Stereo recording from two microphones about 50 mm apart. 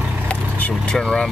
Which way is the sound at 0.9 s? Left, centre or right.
Centre.